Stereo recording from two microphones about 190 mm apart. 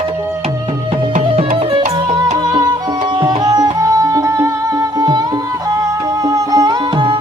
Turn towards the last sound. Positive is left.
turn(degrees=-25)  # may be behind; listen again after turning